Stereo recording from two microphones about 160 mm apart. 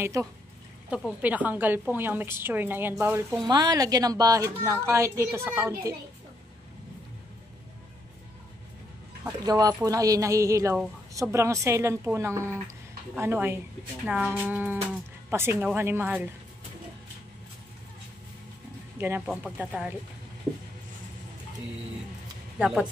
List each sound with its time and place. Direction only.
0.0 s a woman's voice: 15° right (ahead or behind)
9.4 s a woman's voice: 25° right (ahead or behind)
18.9 s a woman's voice: 15° right (ahead or behind)
22.6 s speech: 5° right (ahead or behind)